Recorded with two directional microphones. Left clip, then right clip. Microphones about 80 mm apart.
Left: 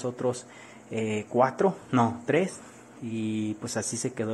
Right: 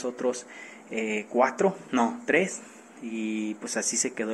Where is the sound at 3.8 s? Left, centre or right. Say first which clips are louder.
Right 3 dB; centre.